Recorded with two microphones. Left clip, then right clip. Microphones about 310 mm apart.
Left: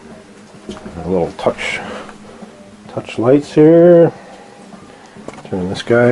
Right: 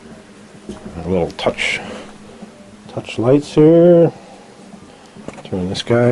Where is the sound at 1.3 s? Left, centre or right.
Centre.